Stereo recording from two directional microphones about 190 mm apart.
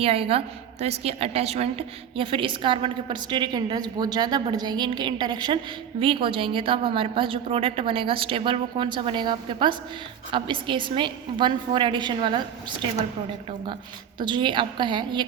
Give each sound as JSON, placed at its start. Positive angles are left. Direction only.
{"t": 0.0, "sound": "a woman's voice", "side_deg": -30}
{"t": 14.2, "sound": "a woman's voice", "side_deg": -25}